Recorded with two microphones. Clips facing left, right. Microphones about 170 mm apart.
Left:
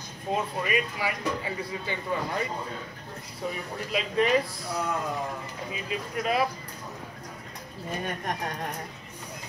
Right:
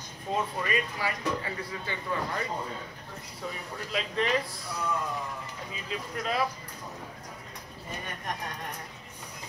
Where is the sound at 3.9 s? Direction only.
10° left (ahead or behind).